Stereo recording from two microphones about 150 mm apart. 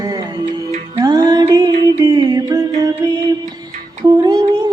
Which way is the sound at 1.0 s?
25° right (ahead or behind).